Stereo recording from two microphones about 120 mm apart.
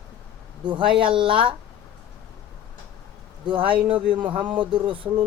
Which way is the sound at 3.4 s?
45° right (ahead or behind).